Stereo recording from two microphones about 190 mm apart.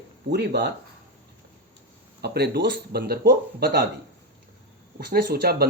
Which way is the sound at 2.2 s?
55° right (ahead or behind).